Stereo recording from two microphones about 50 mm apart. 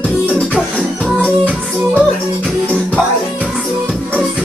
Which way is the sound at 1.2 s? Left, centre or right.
Left.